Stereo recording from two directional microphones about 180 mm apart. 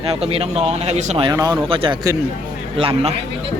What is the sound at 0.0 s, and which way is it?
Speech, 35° right (ahead or behind).